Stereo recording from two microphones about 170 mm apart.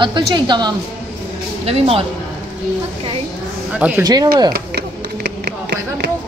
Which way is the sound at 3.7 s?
10° right (ahead or behind).